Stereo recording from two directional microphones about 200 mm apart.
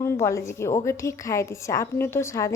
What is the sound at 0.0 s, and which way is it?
A woman's voice, 15° left (ahead or behind).